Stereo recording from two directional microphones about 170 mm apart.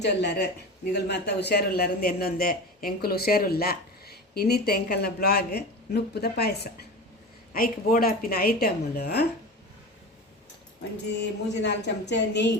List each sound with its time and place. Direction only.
0.0 s a man's voice: 85° left
7.5 s a woman's voice: 60° left (ahead or behind)
11.6 s a woman's voice: 90° left